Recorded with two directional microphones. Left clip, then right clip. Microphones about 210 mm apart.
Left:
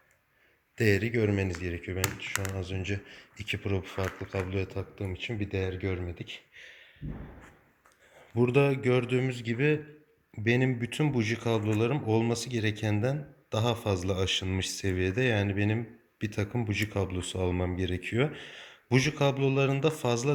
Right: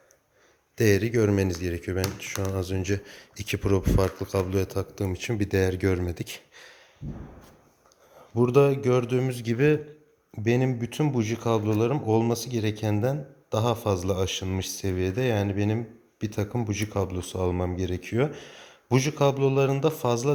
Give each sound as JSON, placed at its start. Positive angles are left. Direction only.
{"t": 0.8, "sound": "speech", "side_deg": -15}
{"t": 8.4, "sound": "speech", "side_deg": -5}